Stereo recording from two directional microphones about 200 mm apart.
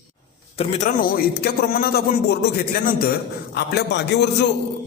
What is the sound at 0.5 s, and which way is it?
Speech, 30° left (ahead or behind).